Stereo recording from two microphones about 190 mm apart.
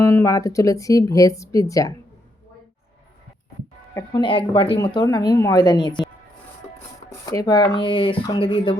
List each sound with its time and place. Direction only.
0.0 s speech: 15° left (ahead or behind)
3.9 s speech: 20° left (ahead or behind)
7.1 s speech: 20° left (ahead or behind)